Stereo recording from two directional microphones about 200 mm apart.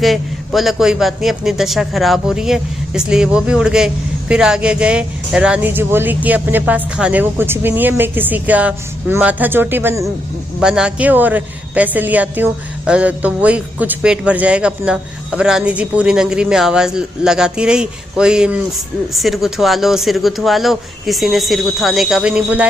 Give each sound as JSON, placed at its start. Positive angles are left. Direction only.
{"t": 0.0, "sound": "a man's voice", "side_deg": 0}